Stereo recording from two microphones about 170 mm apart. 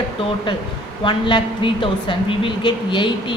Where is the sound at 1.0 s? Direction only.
30° left (ahead or behind).